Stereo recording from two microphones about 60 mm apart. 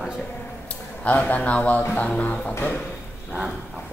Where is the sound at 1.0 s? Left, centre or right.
Left.